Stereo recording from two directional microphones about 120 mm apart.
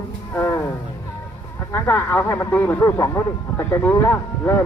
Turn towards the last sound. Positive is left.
turn(degrees=20)  # may be behind; listen again after turning